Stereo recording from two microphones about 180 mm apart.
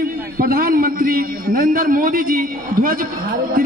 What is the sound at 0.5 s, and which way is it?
A man's voice, 55° right (ahead or behind).